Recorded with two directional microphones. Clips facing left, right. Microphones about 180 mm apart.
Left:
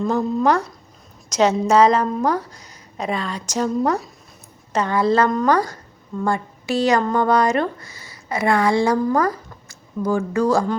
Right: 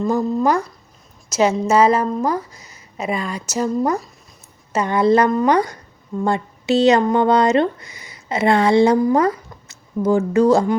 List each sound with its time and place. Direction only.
0.0 s a woman's voice: centre (ahead or behind); by 10.8 s 20° right (ahead or behind)